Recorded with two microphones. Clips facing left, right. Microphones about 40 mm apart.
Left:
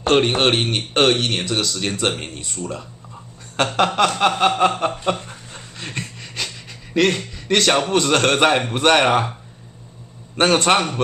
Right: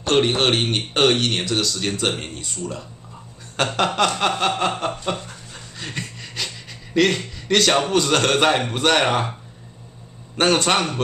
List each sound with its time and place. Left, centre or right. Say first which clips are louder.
0.0 s a man's voice: left 2 dB; centre
0.4 s speech: left 1 dB; centre
3.5 s chuckle: left 2 dB; centre
5.2 s a sound: left 1 dB; centre
5.9 s pant: left 1 dB; centre
7.9 s speech: left 1 dB; centre
10.3 s chuckle: left 2 dB; centre